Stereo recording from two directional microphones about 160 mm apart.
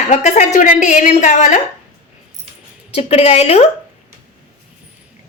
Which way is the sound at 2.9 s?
40° left (ahead or behind).